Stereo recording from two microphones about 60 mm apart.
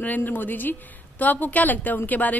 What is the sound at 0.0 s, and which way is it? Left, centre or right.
A woman's voice, left.